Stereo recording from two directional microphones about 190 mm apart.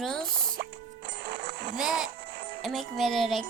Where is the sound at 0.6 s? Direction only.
55° right (ahead or behind).